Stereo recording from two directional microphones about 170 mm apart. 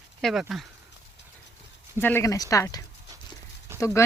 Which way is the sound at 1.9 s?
15° left (ahead or behind).